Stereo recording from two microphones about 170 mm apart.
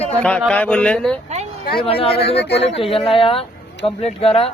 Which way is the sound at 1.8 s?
35° left (ahead or behind).